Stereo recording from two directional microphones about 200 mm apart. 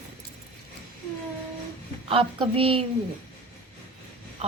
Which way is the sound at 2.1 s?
25° right (ahead or behind).